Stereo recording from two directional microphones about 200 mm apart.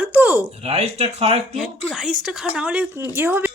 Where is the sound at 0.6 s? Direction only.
30° right (ahead or behind).